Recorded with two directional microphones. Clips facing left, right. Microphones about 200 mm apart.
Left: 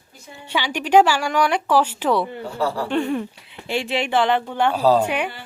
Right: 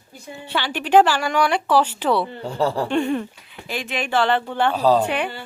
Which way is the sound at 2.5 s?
25° right (ahead or behind).